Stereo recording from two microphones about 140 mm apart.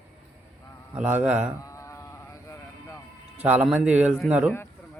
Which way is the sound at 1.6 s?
20° left (ahead or behind).